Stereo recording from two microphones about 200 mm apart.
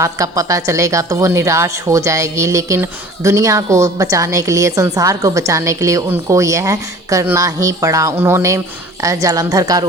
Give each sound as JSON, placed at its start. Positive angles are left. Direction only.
{"t": 0.0, "sound": "speech", "side_deg": -15}